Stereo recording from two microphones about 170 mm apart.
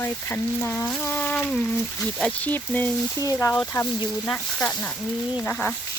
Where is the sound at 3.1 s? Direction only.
20° left (ahead or behind).